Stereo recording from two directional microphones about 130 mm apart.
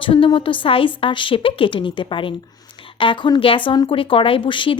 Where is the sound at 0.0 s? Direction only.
40° left (ahead or behind).